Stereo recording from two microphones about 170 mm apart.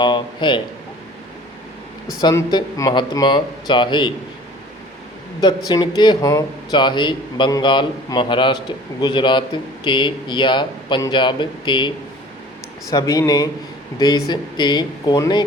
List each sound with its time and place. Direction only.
0.0 s a man's voice: 25° left (ahead or behind)
2.2 s a man's voice: 25° left (ahead or behind)
5.4 s a man's voice: 25° left (ahead or behind)
12.9 s a man's voice: 20° left (ahead or behind)